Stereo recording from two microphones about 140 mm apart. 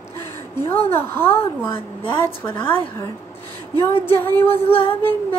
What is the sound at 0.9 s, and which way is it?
A woman's voice, 15° left (ahead or behind).